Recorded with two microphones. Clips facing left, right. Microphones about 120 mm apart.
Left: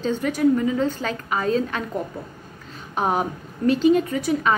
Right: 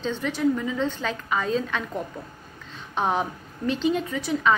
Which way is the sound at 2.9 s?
10° left (ahead or behind).